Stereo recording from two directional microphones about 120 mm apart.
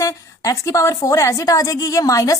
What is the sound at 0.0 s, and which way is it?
A woman's voice, 30° left (ahead or behind).